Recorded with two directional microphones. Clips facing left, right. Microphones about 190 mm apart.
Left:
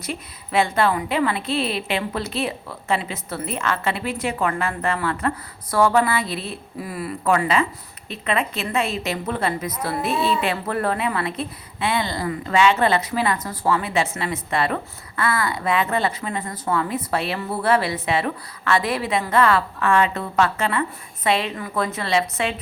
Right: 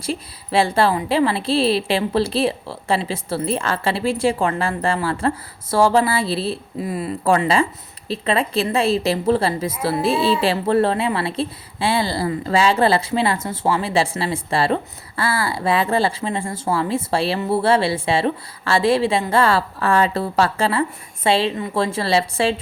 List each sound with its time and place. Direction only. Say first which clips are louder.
0.0 s a woman's voice: right 5 dB; 30° right (ahead or behind)